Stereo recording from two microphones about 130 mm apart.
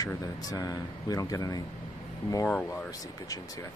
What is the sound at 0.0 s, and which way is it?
Speech, 30° left (ahead or behind).